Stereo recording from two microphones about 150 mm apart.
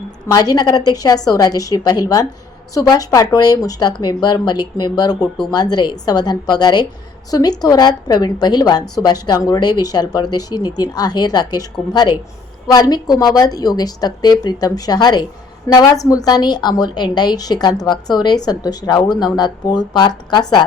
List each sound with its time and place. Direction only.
0.3 s a woman's voice: 25° left (ahead or behind)